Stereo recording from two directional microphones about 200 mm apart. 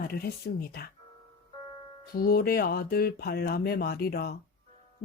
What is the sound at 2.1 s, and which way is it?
Speech, 50° left (ahead or behind).